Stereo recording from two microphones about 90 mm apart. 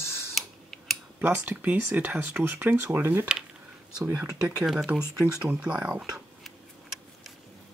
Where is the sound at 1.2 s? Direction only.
20° right (ahead or behind).